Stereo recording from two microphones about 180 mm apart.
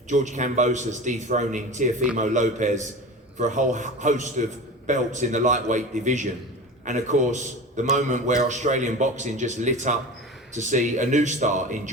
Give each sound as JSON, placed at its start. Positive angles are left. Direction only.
{"t": 0.1, "sound": "a man's voice", "side_deg": -40}